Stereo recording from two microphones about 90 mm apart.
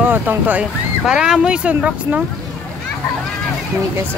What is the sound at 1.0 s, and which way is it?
Speech, 5° right (ahead or behind).